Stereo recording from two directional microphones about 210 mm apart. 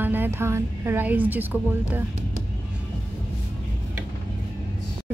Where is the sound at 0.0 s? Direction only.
10° right (ahead or behind).